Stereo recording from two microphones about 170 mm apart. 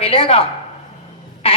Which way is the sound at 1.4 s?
35° left (ahead or behind).